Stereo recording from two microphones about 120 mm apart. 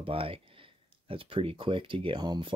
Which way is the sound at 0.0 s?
50° right (ahead or behind).